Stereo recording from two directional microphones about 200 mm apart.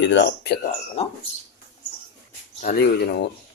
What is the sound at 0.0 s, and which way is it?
Speech, 60° left (ahead or behind).